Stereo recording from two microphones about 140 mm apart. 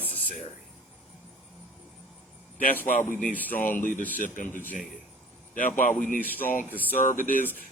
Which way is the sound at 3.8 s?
70° left (ahead or behind).